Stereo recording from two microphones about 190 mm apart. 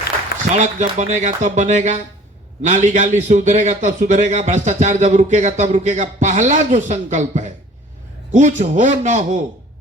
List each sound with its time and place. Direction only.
0.5 s a man's voice: 40° right (ahead or behind)